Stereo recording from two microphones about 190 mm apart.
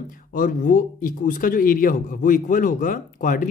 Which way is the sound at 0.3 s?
45° left (ahead or behind).